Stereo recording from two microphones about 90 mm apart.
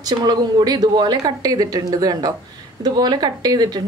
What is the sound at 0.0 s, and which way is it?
A woman's voice, 50° right (ahead or behind).